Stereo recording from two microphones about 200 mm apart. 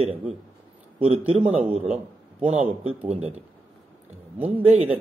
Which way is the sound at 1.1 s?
25° right (ahead or behind).